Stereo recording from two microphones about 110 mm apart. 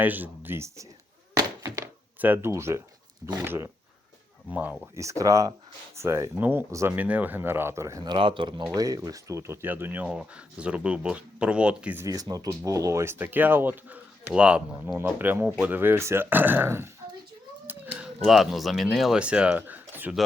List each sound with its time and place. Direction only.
0.0 s speech: 15° right (ahead or behind)
1.4 s thunk: 30° right (ahead or behind)
2.1 s speech: 15° right (ahead or behind)
4.9 s speech: 30° right (ahead or behind)
6.9 s speech: 15° right (ahead or behind)
8.0 s speech: 45° right (ahead or behind)
8.7 s speech: 35° right (ahead or behind); by 11.9 s 10° right (ahead or behind)
11.9 s speech: 30° right (ahead or behind)
18.3 s speech: centre (ahead or behind)